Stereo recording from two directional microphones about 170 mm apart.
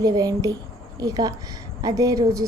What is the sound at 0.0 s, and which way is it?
A woman's voice, 20° right (ahead or behind).